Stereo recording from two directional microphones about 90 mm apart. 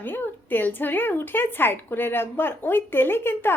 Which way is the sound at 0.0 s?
20° left (ahead or behind).